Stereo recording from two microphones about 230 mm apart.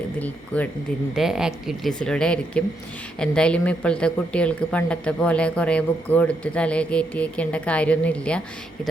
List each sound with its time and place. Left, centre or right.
0.2 s speech: centre